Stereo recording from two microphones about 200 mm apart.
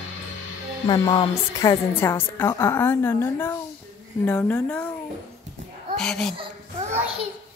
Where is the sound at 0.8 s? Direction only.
20° left (ahead or behind).